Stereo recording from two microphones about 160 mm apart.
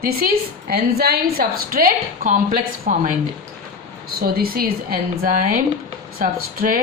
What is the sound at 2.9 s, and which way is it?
Speech, 50° right (ahead or behind).